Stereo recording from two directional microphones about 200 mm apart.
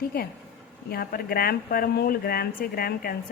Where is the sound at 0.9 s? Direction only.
50° left (ahead or behind).